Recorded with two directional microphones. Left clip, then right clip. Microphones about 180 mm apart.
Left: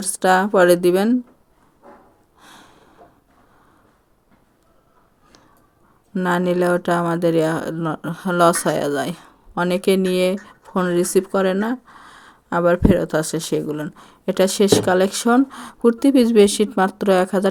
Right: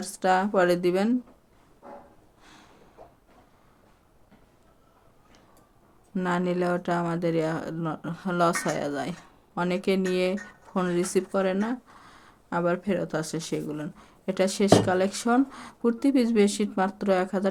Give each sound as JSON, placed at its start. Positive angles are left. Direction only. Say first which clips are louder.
{"t": 0.0, "sound": "speech", "louder": "left 7 dB", "side_deg": 40}
{"t": 2.4, "sound": "a sound", "louder": "left 9 dB", "side_deg": 40}
{"t": 6.1, "sound": "speech", "louder": "left 8 dB", "side_deg": 40}